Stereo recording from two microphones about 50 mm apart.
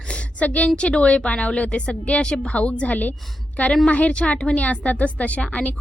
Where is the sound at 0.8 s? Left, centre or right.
Left.